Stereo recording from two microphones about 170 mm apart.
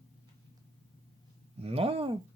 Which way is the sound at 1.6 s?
35° right (ahead or behind).